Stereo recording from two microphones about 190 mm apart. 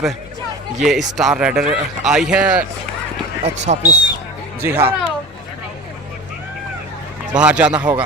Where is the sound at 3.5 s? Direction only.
35° right (ahead or behind).